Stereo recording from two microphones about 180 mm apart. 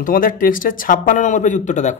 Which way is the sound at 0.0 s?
50° left (ahead or behind).